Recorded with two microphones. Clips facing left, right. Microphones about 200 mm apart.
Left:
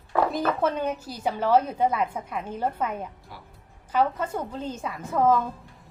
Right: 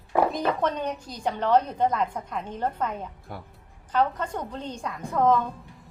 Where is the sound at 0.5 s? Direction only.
5° left (ahead or behind).